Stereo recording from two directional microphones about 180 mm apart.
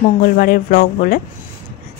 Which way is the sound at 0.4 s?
50° left (ahead or behind).